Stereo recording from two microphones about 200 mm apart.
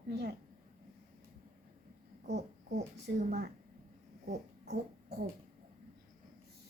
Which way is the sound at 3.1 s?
55° right (ahead or behind).